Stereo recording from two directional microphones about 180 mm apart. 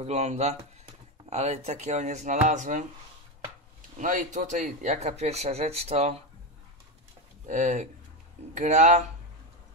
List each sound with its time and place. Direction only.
0.0 s a man's voice: 35° right (ahead or behind)
4.0 s a man's voice: 45° right (ahead or behind)
7.4 s a man's voice: 40° right (ahead or behind)